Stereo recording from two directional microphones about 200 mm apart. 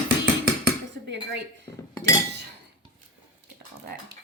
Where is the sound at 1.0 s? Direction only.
60° right (ahead or behind).